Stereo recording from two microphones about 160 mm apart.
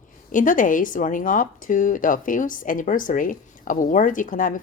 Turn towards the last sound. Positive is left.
turn(degrees=55)  # may be behind; listen again after turning